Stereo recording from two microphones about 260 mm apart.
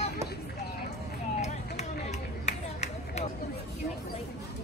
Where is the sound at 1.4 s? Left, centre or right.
Left.